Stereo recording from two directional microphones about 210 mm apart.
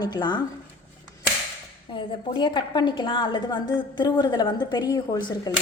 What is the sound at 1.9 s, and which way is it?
Speech, 25° left (ahead or behind).